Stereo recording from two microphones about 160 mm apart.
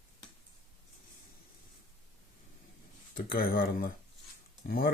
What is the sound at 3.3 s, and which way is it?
Speech, 65° left (ahead or behind).